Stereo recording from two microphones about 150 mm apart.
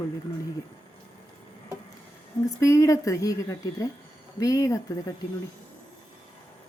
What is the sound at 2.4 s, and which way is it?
A woman's voice, 20° left (ahead or behind).